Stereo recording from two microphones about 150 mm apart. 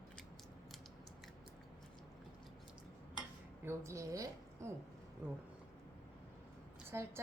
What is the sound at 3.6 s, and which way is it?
A woman's voice, 20° right (ahead or behind).